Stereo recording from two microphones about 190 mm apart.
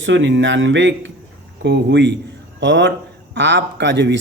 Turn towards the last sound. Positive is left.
turn(degrees=-65)  # may be behind; listen again after turning